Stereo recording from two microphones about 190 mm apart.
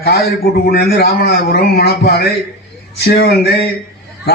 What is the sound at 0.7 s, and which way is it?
A man's voice, 55° left (ahead or behind).